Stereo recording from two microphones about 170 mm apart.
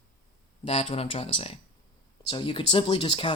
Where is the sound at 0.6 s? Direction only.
35° left (ahead or behind).